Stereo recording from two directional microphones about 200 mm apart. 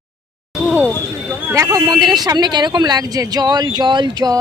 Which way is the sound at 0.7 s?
10° right (ahead or behind).